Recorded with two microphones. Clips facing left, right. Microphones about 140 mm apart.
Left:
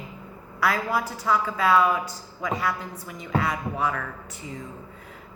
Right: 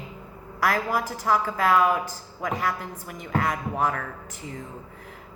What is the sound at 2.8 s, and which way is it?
A woman's voice, 55° right (ahead or behind).